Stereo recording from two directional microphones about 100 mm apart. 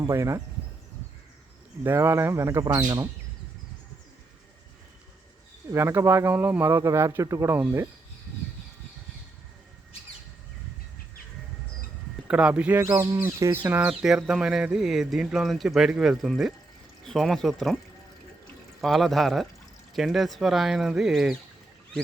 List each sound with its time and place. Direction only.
0.0 s speech: 30° right (ahead or behind)
1.8 s speech: 25° right (ahead or behind)
5.7 s speech: 25° right (ahead or behind)
12.3 s speech: 10° right (ahead or behind)
13.1 s speech: 25° right (ahead or behind)
13.7 s speech: 10° right (ahead or behind)
18.8 s speech: centre (ahead or behind)